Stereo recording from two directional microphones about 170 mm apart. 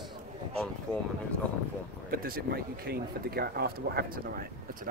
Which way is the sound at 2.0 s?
60° right (ahead or behind).